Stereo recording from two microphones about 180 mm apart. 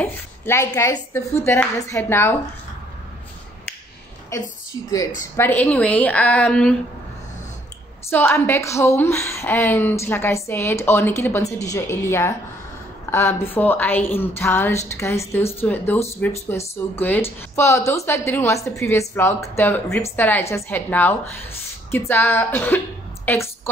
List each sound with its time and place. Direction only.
0.0 s a woman's voice: 15° left (ahead or behind)
4.3 s a woman's voice: 15° left (ahead or behind)
8.1 s a woman's voice: 10° left (ahead or behind)